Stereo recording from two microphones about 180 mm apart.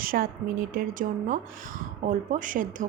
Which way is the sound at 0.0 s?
55° right (ahead or behind).